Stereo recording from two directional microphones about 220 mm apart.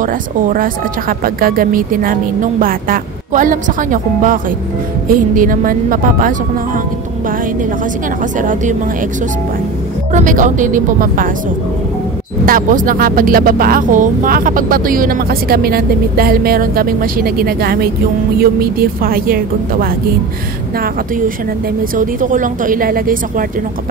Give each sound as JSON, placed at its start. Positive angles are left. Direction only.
{"t": 0.0, "sound": "speech", "side_deg": -40}
{"t": 8.4, "sound": "speech", "side_deg": -35}
{"t": 10.1, "sound": "speech", "side_deg": -35}
{"t": 12.4, "sound": "a woman's voice", "side_deg": -40}
{"t": 21.9, "sound": "speech", "side_deg": -35}